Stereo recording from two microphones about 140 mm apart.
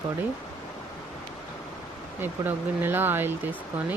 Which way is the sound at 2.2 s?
15° right (ahead or behind).